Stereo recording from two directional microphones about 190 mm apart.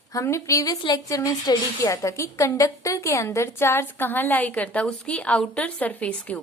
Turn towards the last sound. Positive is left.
turn(degrees=5)  # may be behind; listen again after turning